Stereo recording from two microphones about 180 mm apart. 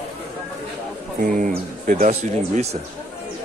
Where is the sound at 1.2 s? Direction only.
50° right (ahead or behind).